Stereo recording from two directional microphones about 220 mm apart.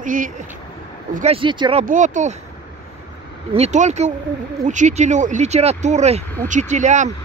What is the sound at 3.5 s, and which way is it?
Speech, 30° right (ahead or behind).